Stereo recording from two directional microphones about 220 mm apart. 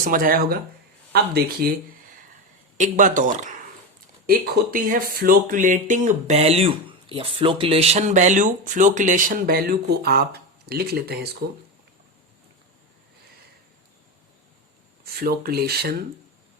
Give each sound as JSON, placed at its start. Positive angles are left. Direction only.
{"t": 0.0, "sound": "speech", "side_deg": -40}
{"t": 15.0, "sound": "speech", "side_deg": -45}